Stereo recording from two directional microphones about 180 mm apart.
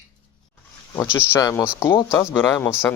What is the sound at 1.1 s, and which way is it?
Speech, 15° left (ahead or behind).